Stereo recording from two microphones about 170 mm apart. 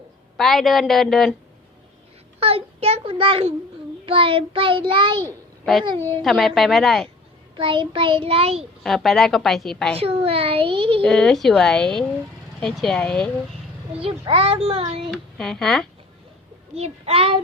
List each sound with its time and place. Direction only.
0.3 s a woman's voice: centre (ahead or behind)
2.4 s child singing: 35° right (ahead or behind)
5.2 s a sound: centre (ahead or behind)
6.2 s a woman's voice: centre (ahead or behind)
7.5 s child singing: 30° right (ahead or behind)
8.8 s a woman's voice: centre (ahead or behind)
10.0 s child singing: 35° right (ahead or behind)
11.0 s a woman's voice: 5° left (ahead or behind)
14.0 s child singing: 35° right (ahead or behind)
15.1 s a woman's voice: 5° left (ahead or behind)
16.7 s child singing: 35° right (ahead or behind)